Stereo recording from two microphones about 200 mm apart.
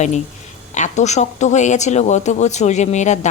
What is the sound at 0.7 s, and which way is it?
Speech, 35° left (ahead or behind).